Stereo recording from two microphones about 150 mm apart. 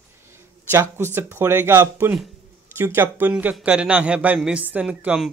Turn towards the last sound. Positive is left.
turn(degrees=-10)  # may be behind; listen again after turning